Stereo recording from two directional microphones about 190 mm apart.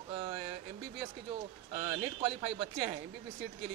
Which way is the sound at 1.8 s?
30° right (ahead or behind).